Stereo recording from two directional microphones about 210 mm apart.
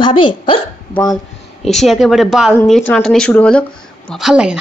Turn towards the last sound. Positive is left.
turn(degrees=-5)  # may be behind; listen again after turning